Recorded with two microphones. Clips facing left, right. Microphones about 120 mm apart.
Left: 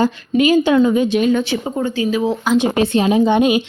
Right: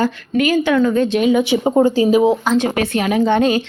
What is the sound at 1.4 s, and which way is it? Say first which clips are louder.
Speech: right 4 dB; 20° right (ahead or behind).